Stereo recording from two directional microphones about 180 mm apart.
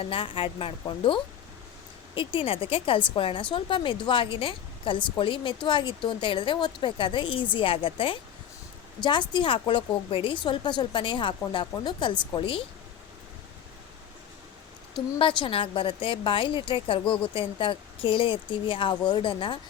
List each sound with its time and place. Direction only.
0.0 s a woman's voice: 30° left (ahead or behind)
15.2 s a woman's voice: 25° left (ahead or behind)